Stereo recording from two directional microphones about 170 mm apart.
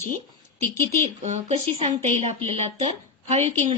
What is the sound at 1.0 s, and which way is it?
A woman's voice, 40° right (ahead or behind).